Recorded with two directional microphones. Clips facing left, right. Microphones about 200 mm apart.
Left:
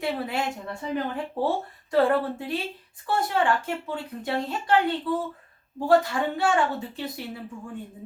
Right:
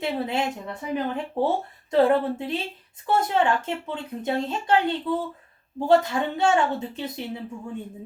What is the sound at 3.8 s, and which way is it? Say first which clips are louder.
A woman's voice: right 2 dB; 20° right (ahead or behind).